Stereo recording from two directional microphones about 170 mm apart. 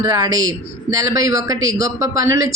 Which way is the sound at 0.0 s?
20° right (ahead or behind).